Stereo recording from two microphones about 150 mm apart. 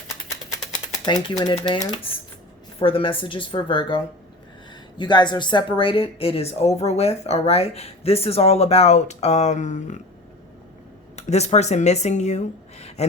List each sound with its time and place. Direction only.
1.0 s a woman's voice: 25° left (ahead or behind); by 10.0 s 55° left (ahead or behind)
11.2 s speech: 45° left (ahead or behind)